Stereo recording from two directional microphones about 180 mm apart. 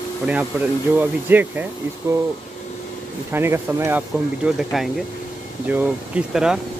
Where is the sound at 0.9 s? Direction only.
10° right (ahead or behind).